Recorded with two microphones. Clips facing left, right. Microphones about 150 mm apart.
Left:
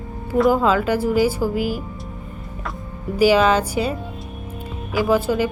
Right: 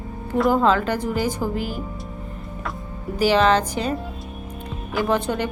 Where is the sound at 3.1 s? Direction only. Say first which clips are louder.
Left 2 dB; 10° left (ahead or behind).